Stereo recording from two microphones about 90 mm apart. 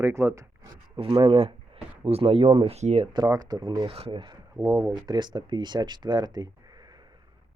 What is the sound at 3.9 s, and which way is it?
Speech, 90° right.